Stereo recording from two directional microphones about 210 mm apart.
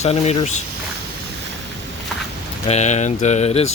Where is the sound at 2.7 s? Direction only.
30° left (ahead or behind).